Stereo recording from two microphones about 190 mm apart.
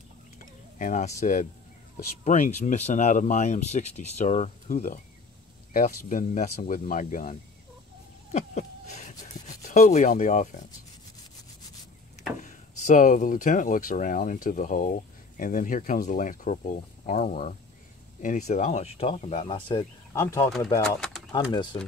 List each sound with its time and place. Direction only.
0.7 s speech: 40° left (ahead or behind)
8.3 s a sound: 35° left (ahead or behind)
9.6 s rub: 40° left (ahead or behind)
12.4 s speech: 40° left (ahead or behind); by 20.2 s 25° left (ahead or behind)
20.2 s speech: 15° left (ahead or behind)
20.4 s speech: centre (ahead or behind)
21.3 s speech: 20° left (ahead or behind)